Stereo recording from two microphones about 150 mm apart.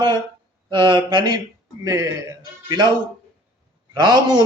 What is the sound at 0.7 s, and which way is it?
A man's voice, 30° right (ahead or behind).